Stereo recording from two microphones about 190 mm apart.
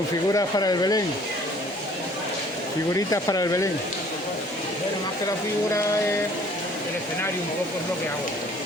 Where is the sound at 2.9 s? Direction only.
15° left (ahead or behind).